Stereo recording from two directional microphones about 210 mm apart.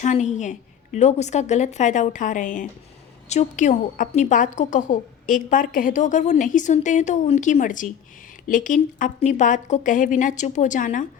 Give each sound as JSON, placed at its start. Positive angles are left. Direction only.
{"t": 0.0, "sound": "a woman's voice", "side_deg": 35}